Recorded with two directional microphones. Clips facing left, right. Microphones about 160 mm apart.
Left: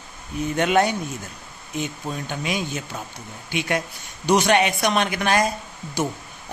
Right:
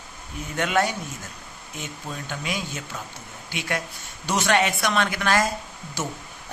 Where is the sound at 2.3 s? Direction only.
20° left (ahead or behind).